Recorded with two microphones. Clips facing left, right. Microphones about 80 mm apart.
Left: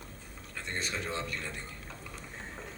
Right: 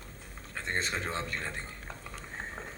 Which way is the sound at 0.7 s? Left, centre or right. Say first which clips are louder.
Right 2 dB; right.